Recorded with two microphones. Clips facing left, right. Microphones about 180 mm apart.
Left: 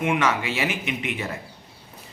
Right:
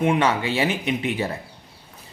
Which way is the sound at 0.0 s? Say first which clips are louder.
Right 3 dB; 30° right (ahead or behind).